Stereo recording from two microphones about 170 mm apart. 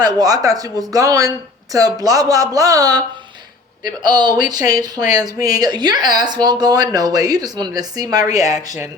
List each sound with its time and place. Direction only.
0.0 s speech: 20° right (ahead or behind)